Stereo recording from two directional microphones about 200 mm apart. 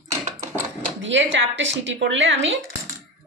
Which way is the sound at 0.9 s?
65° right (ahead or behind).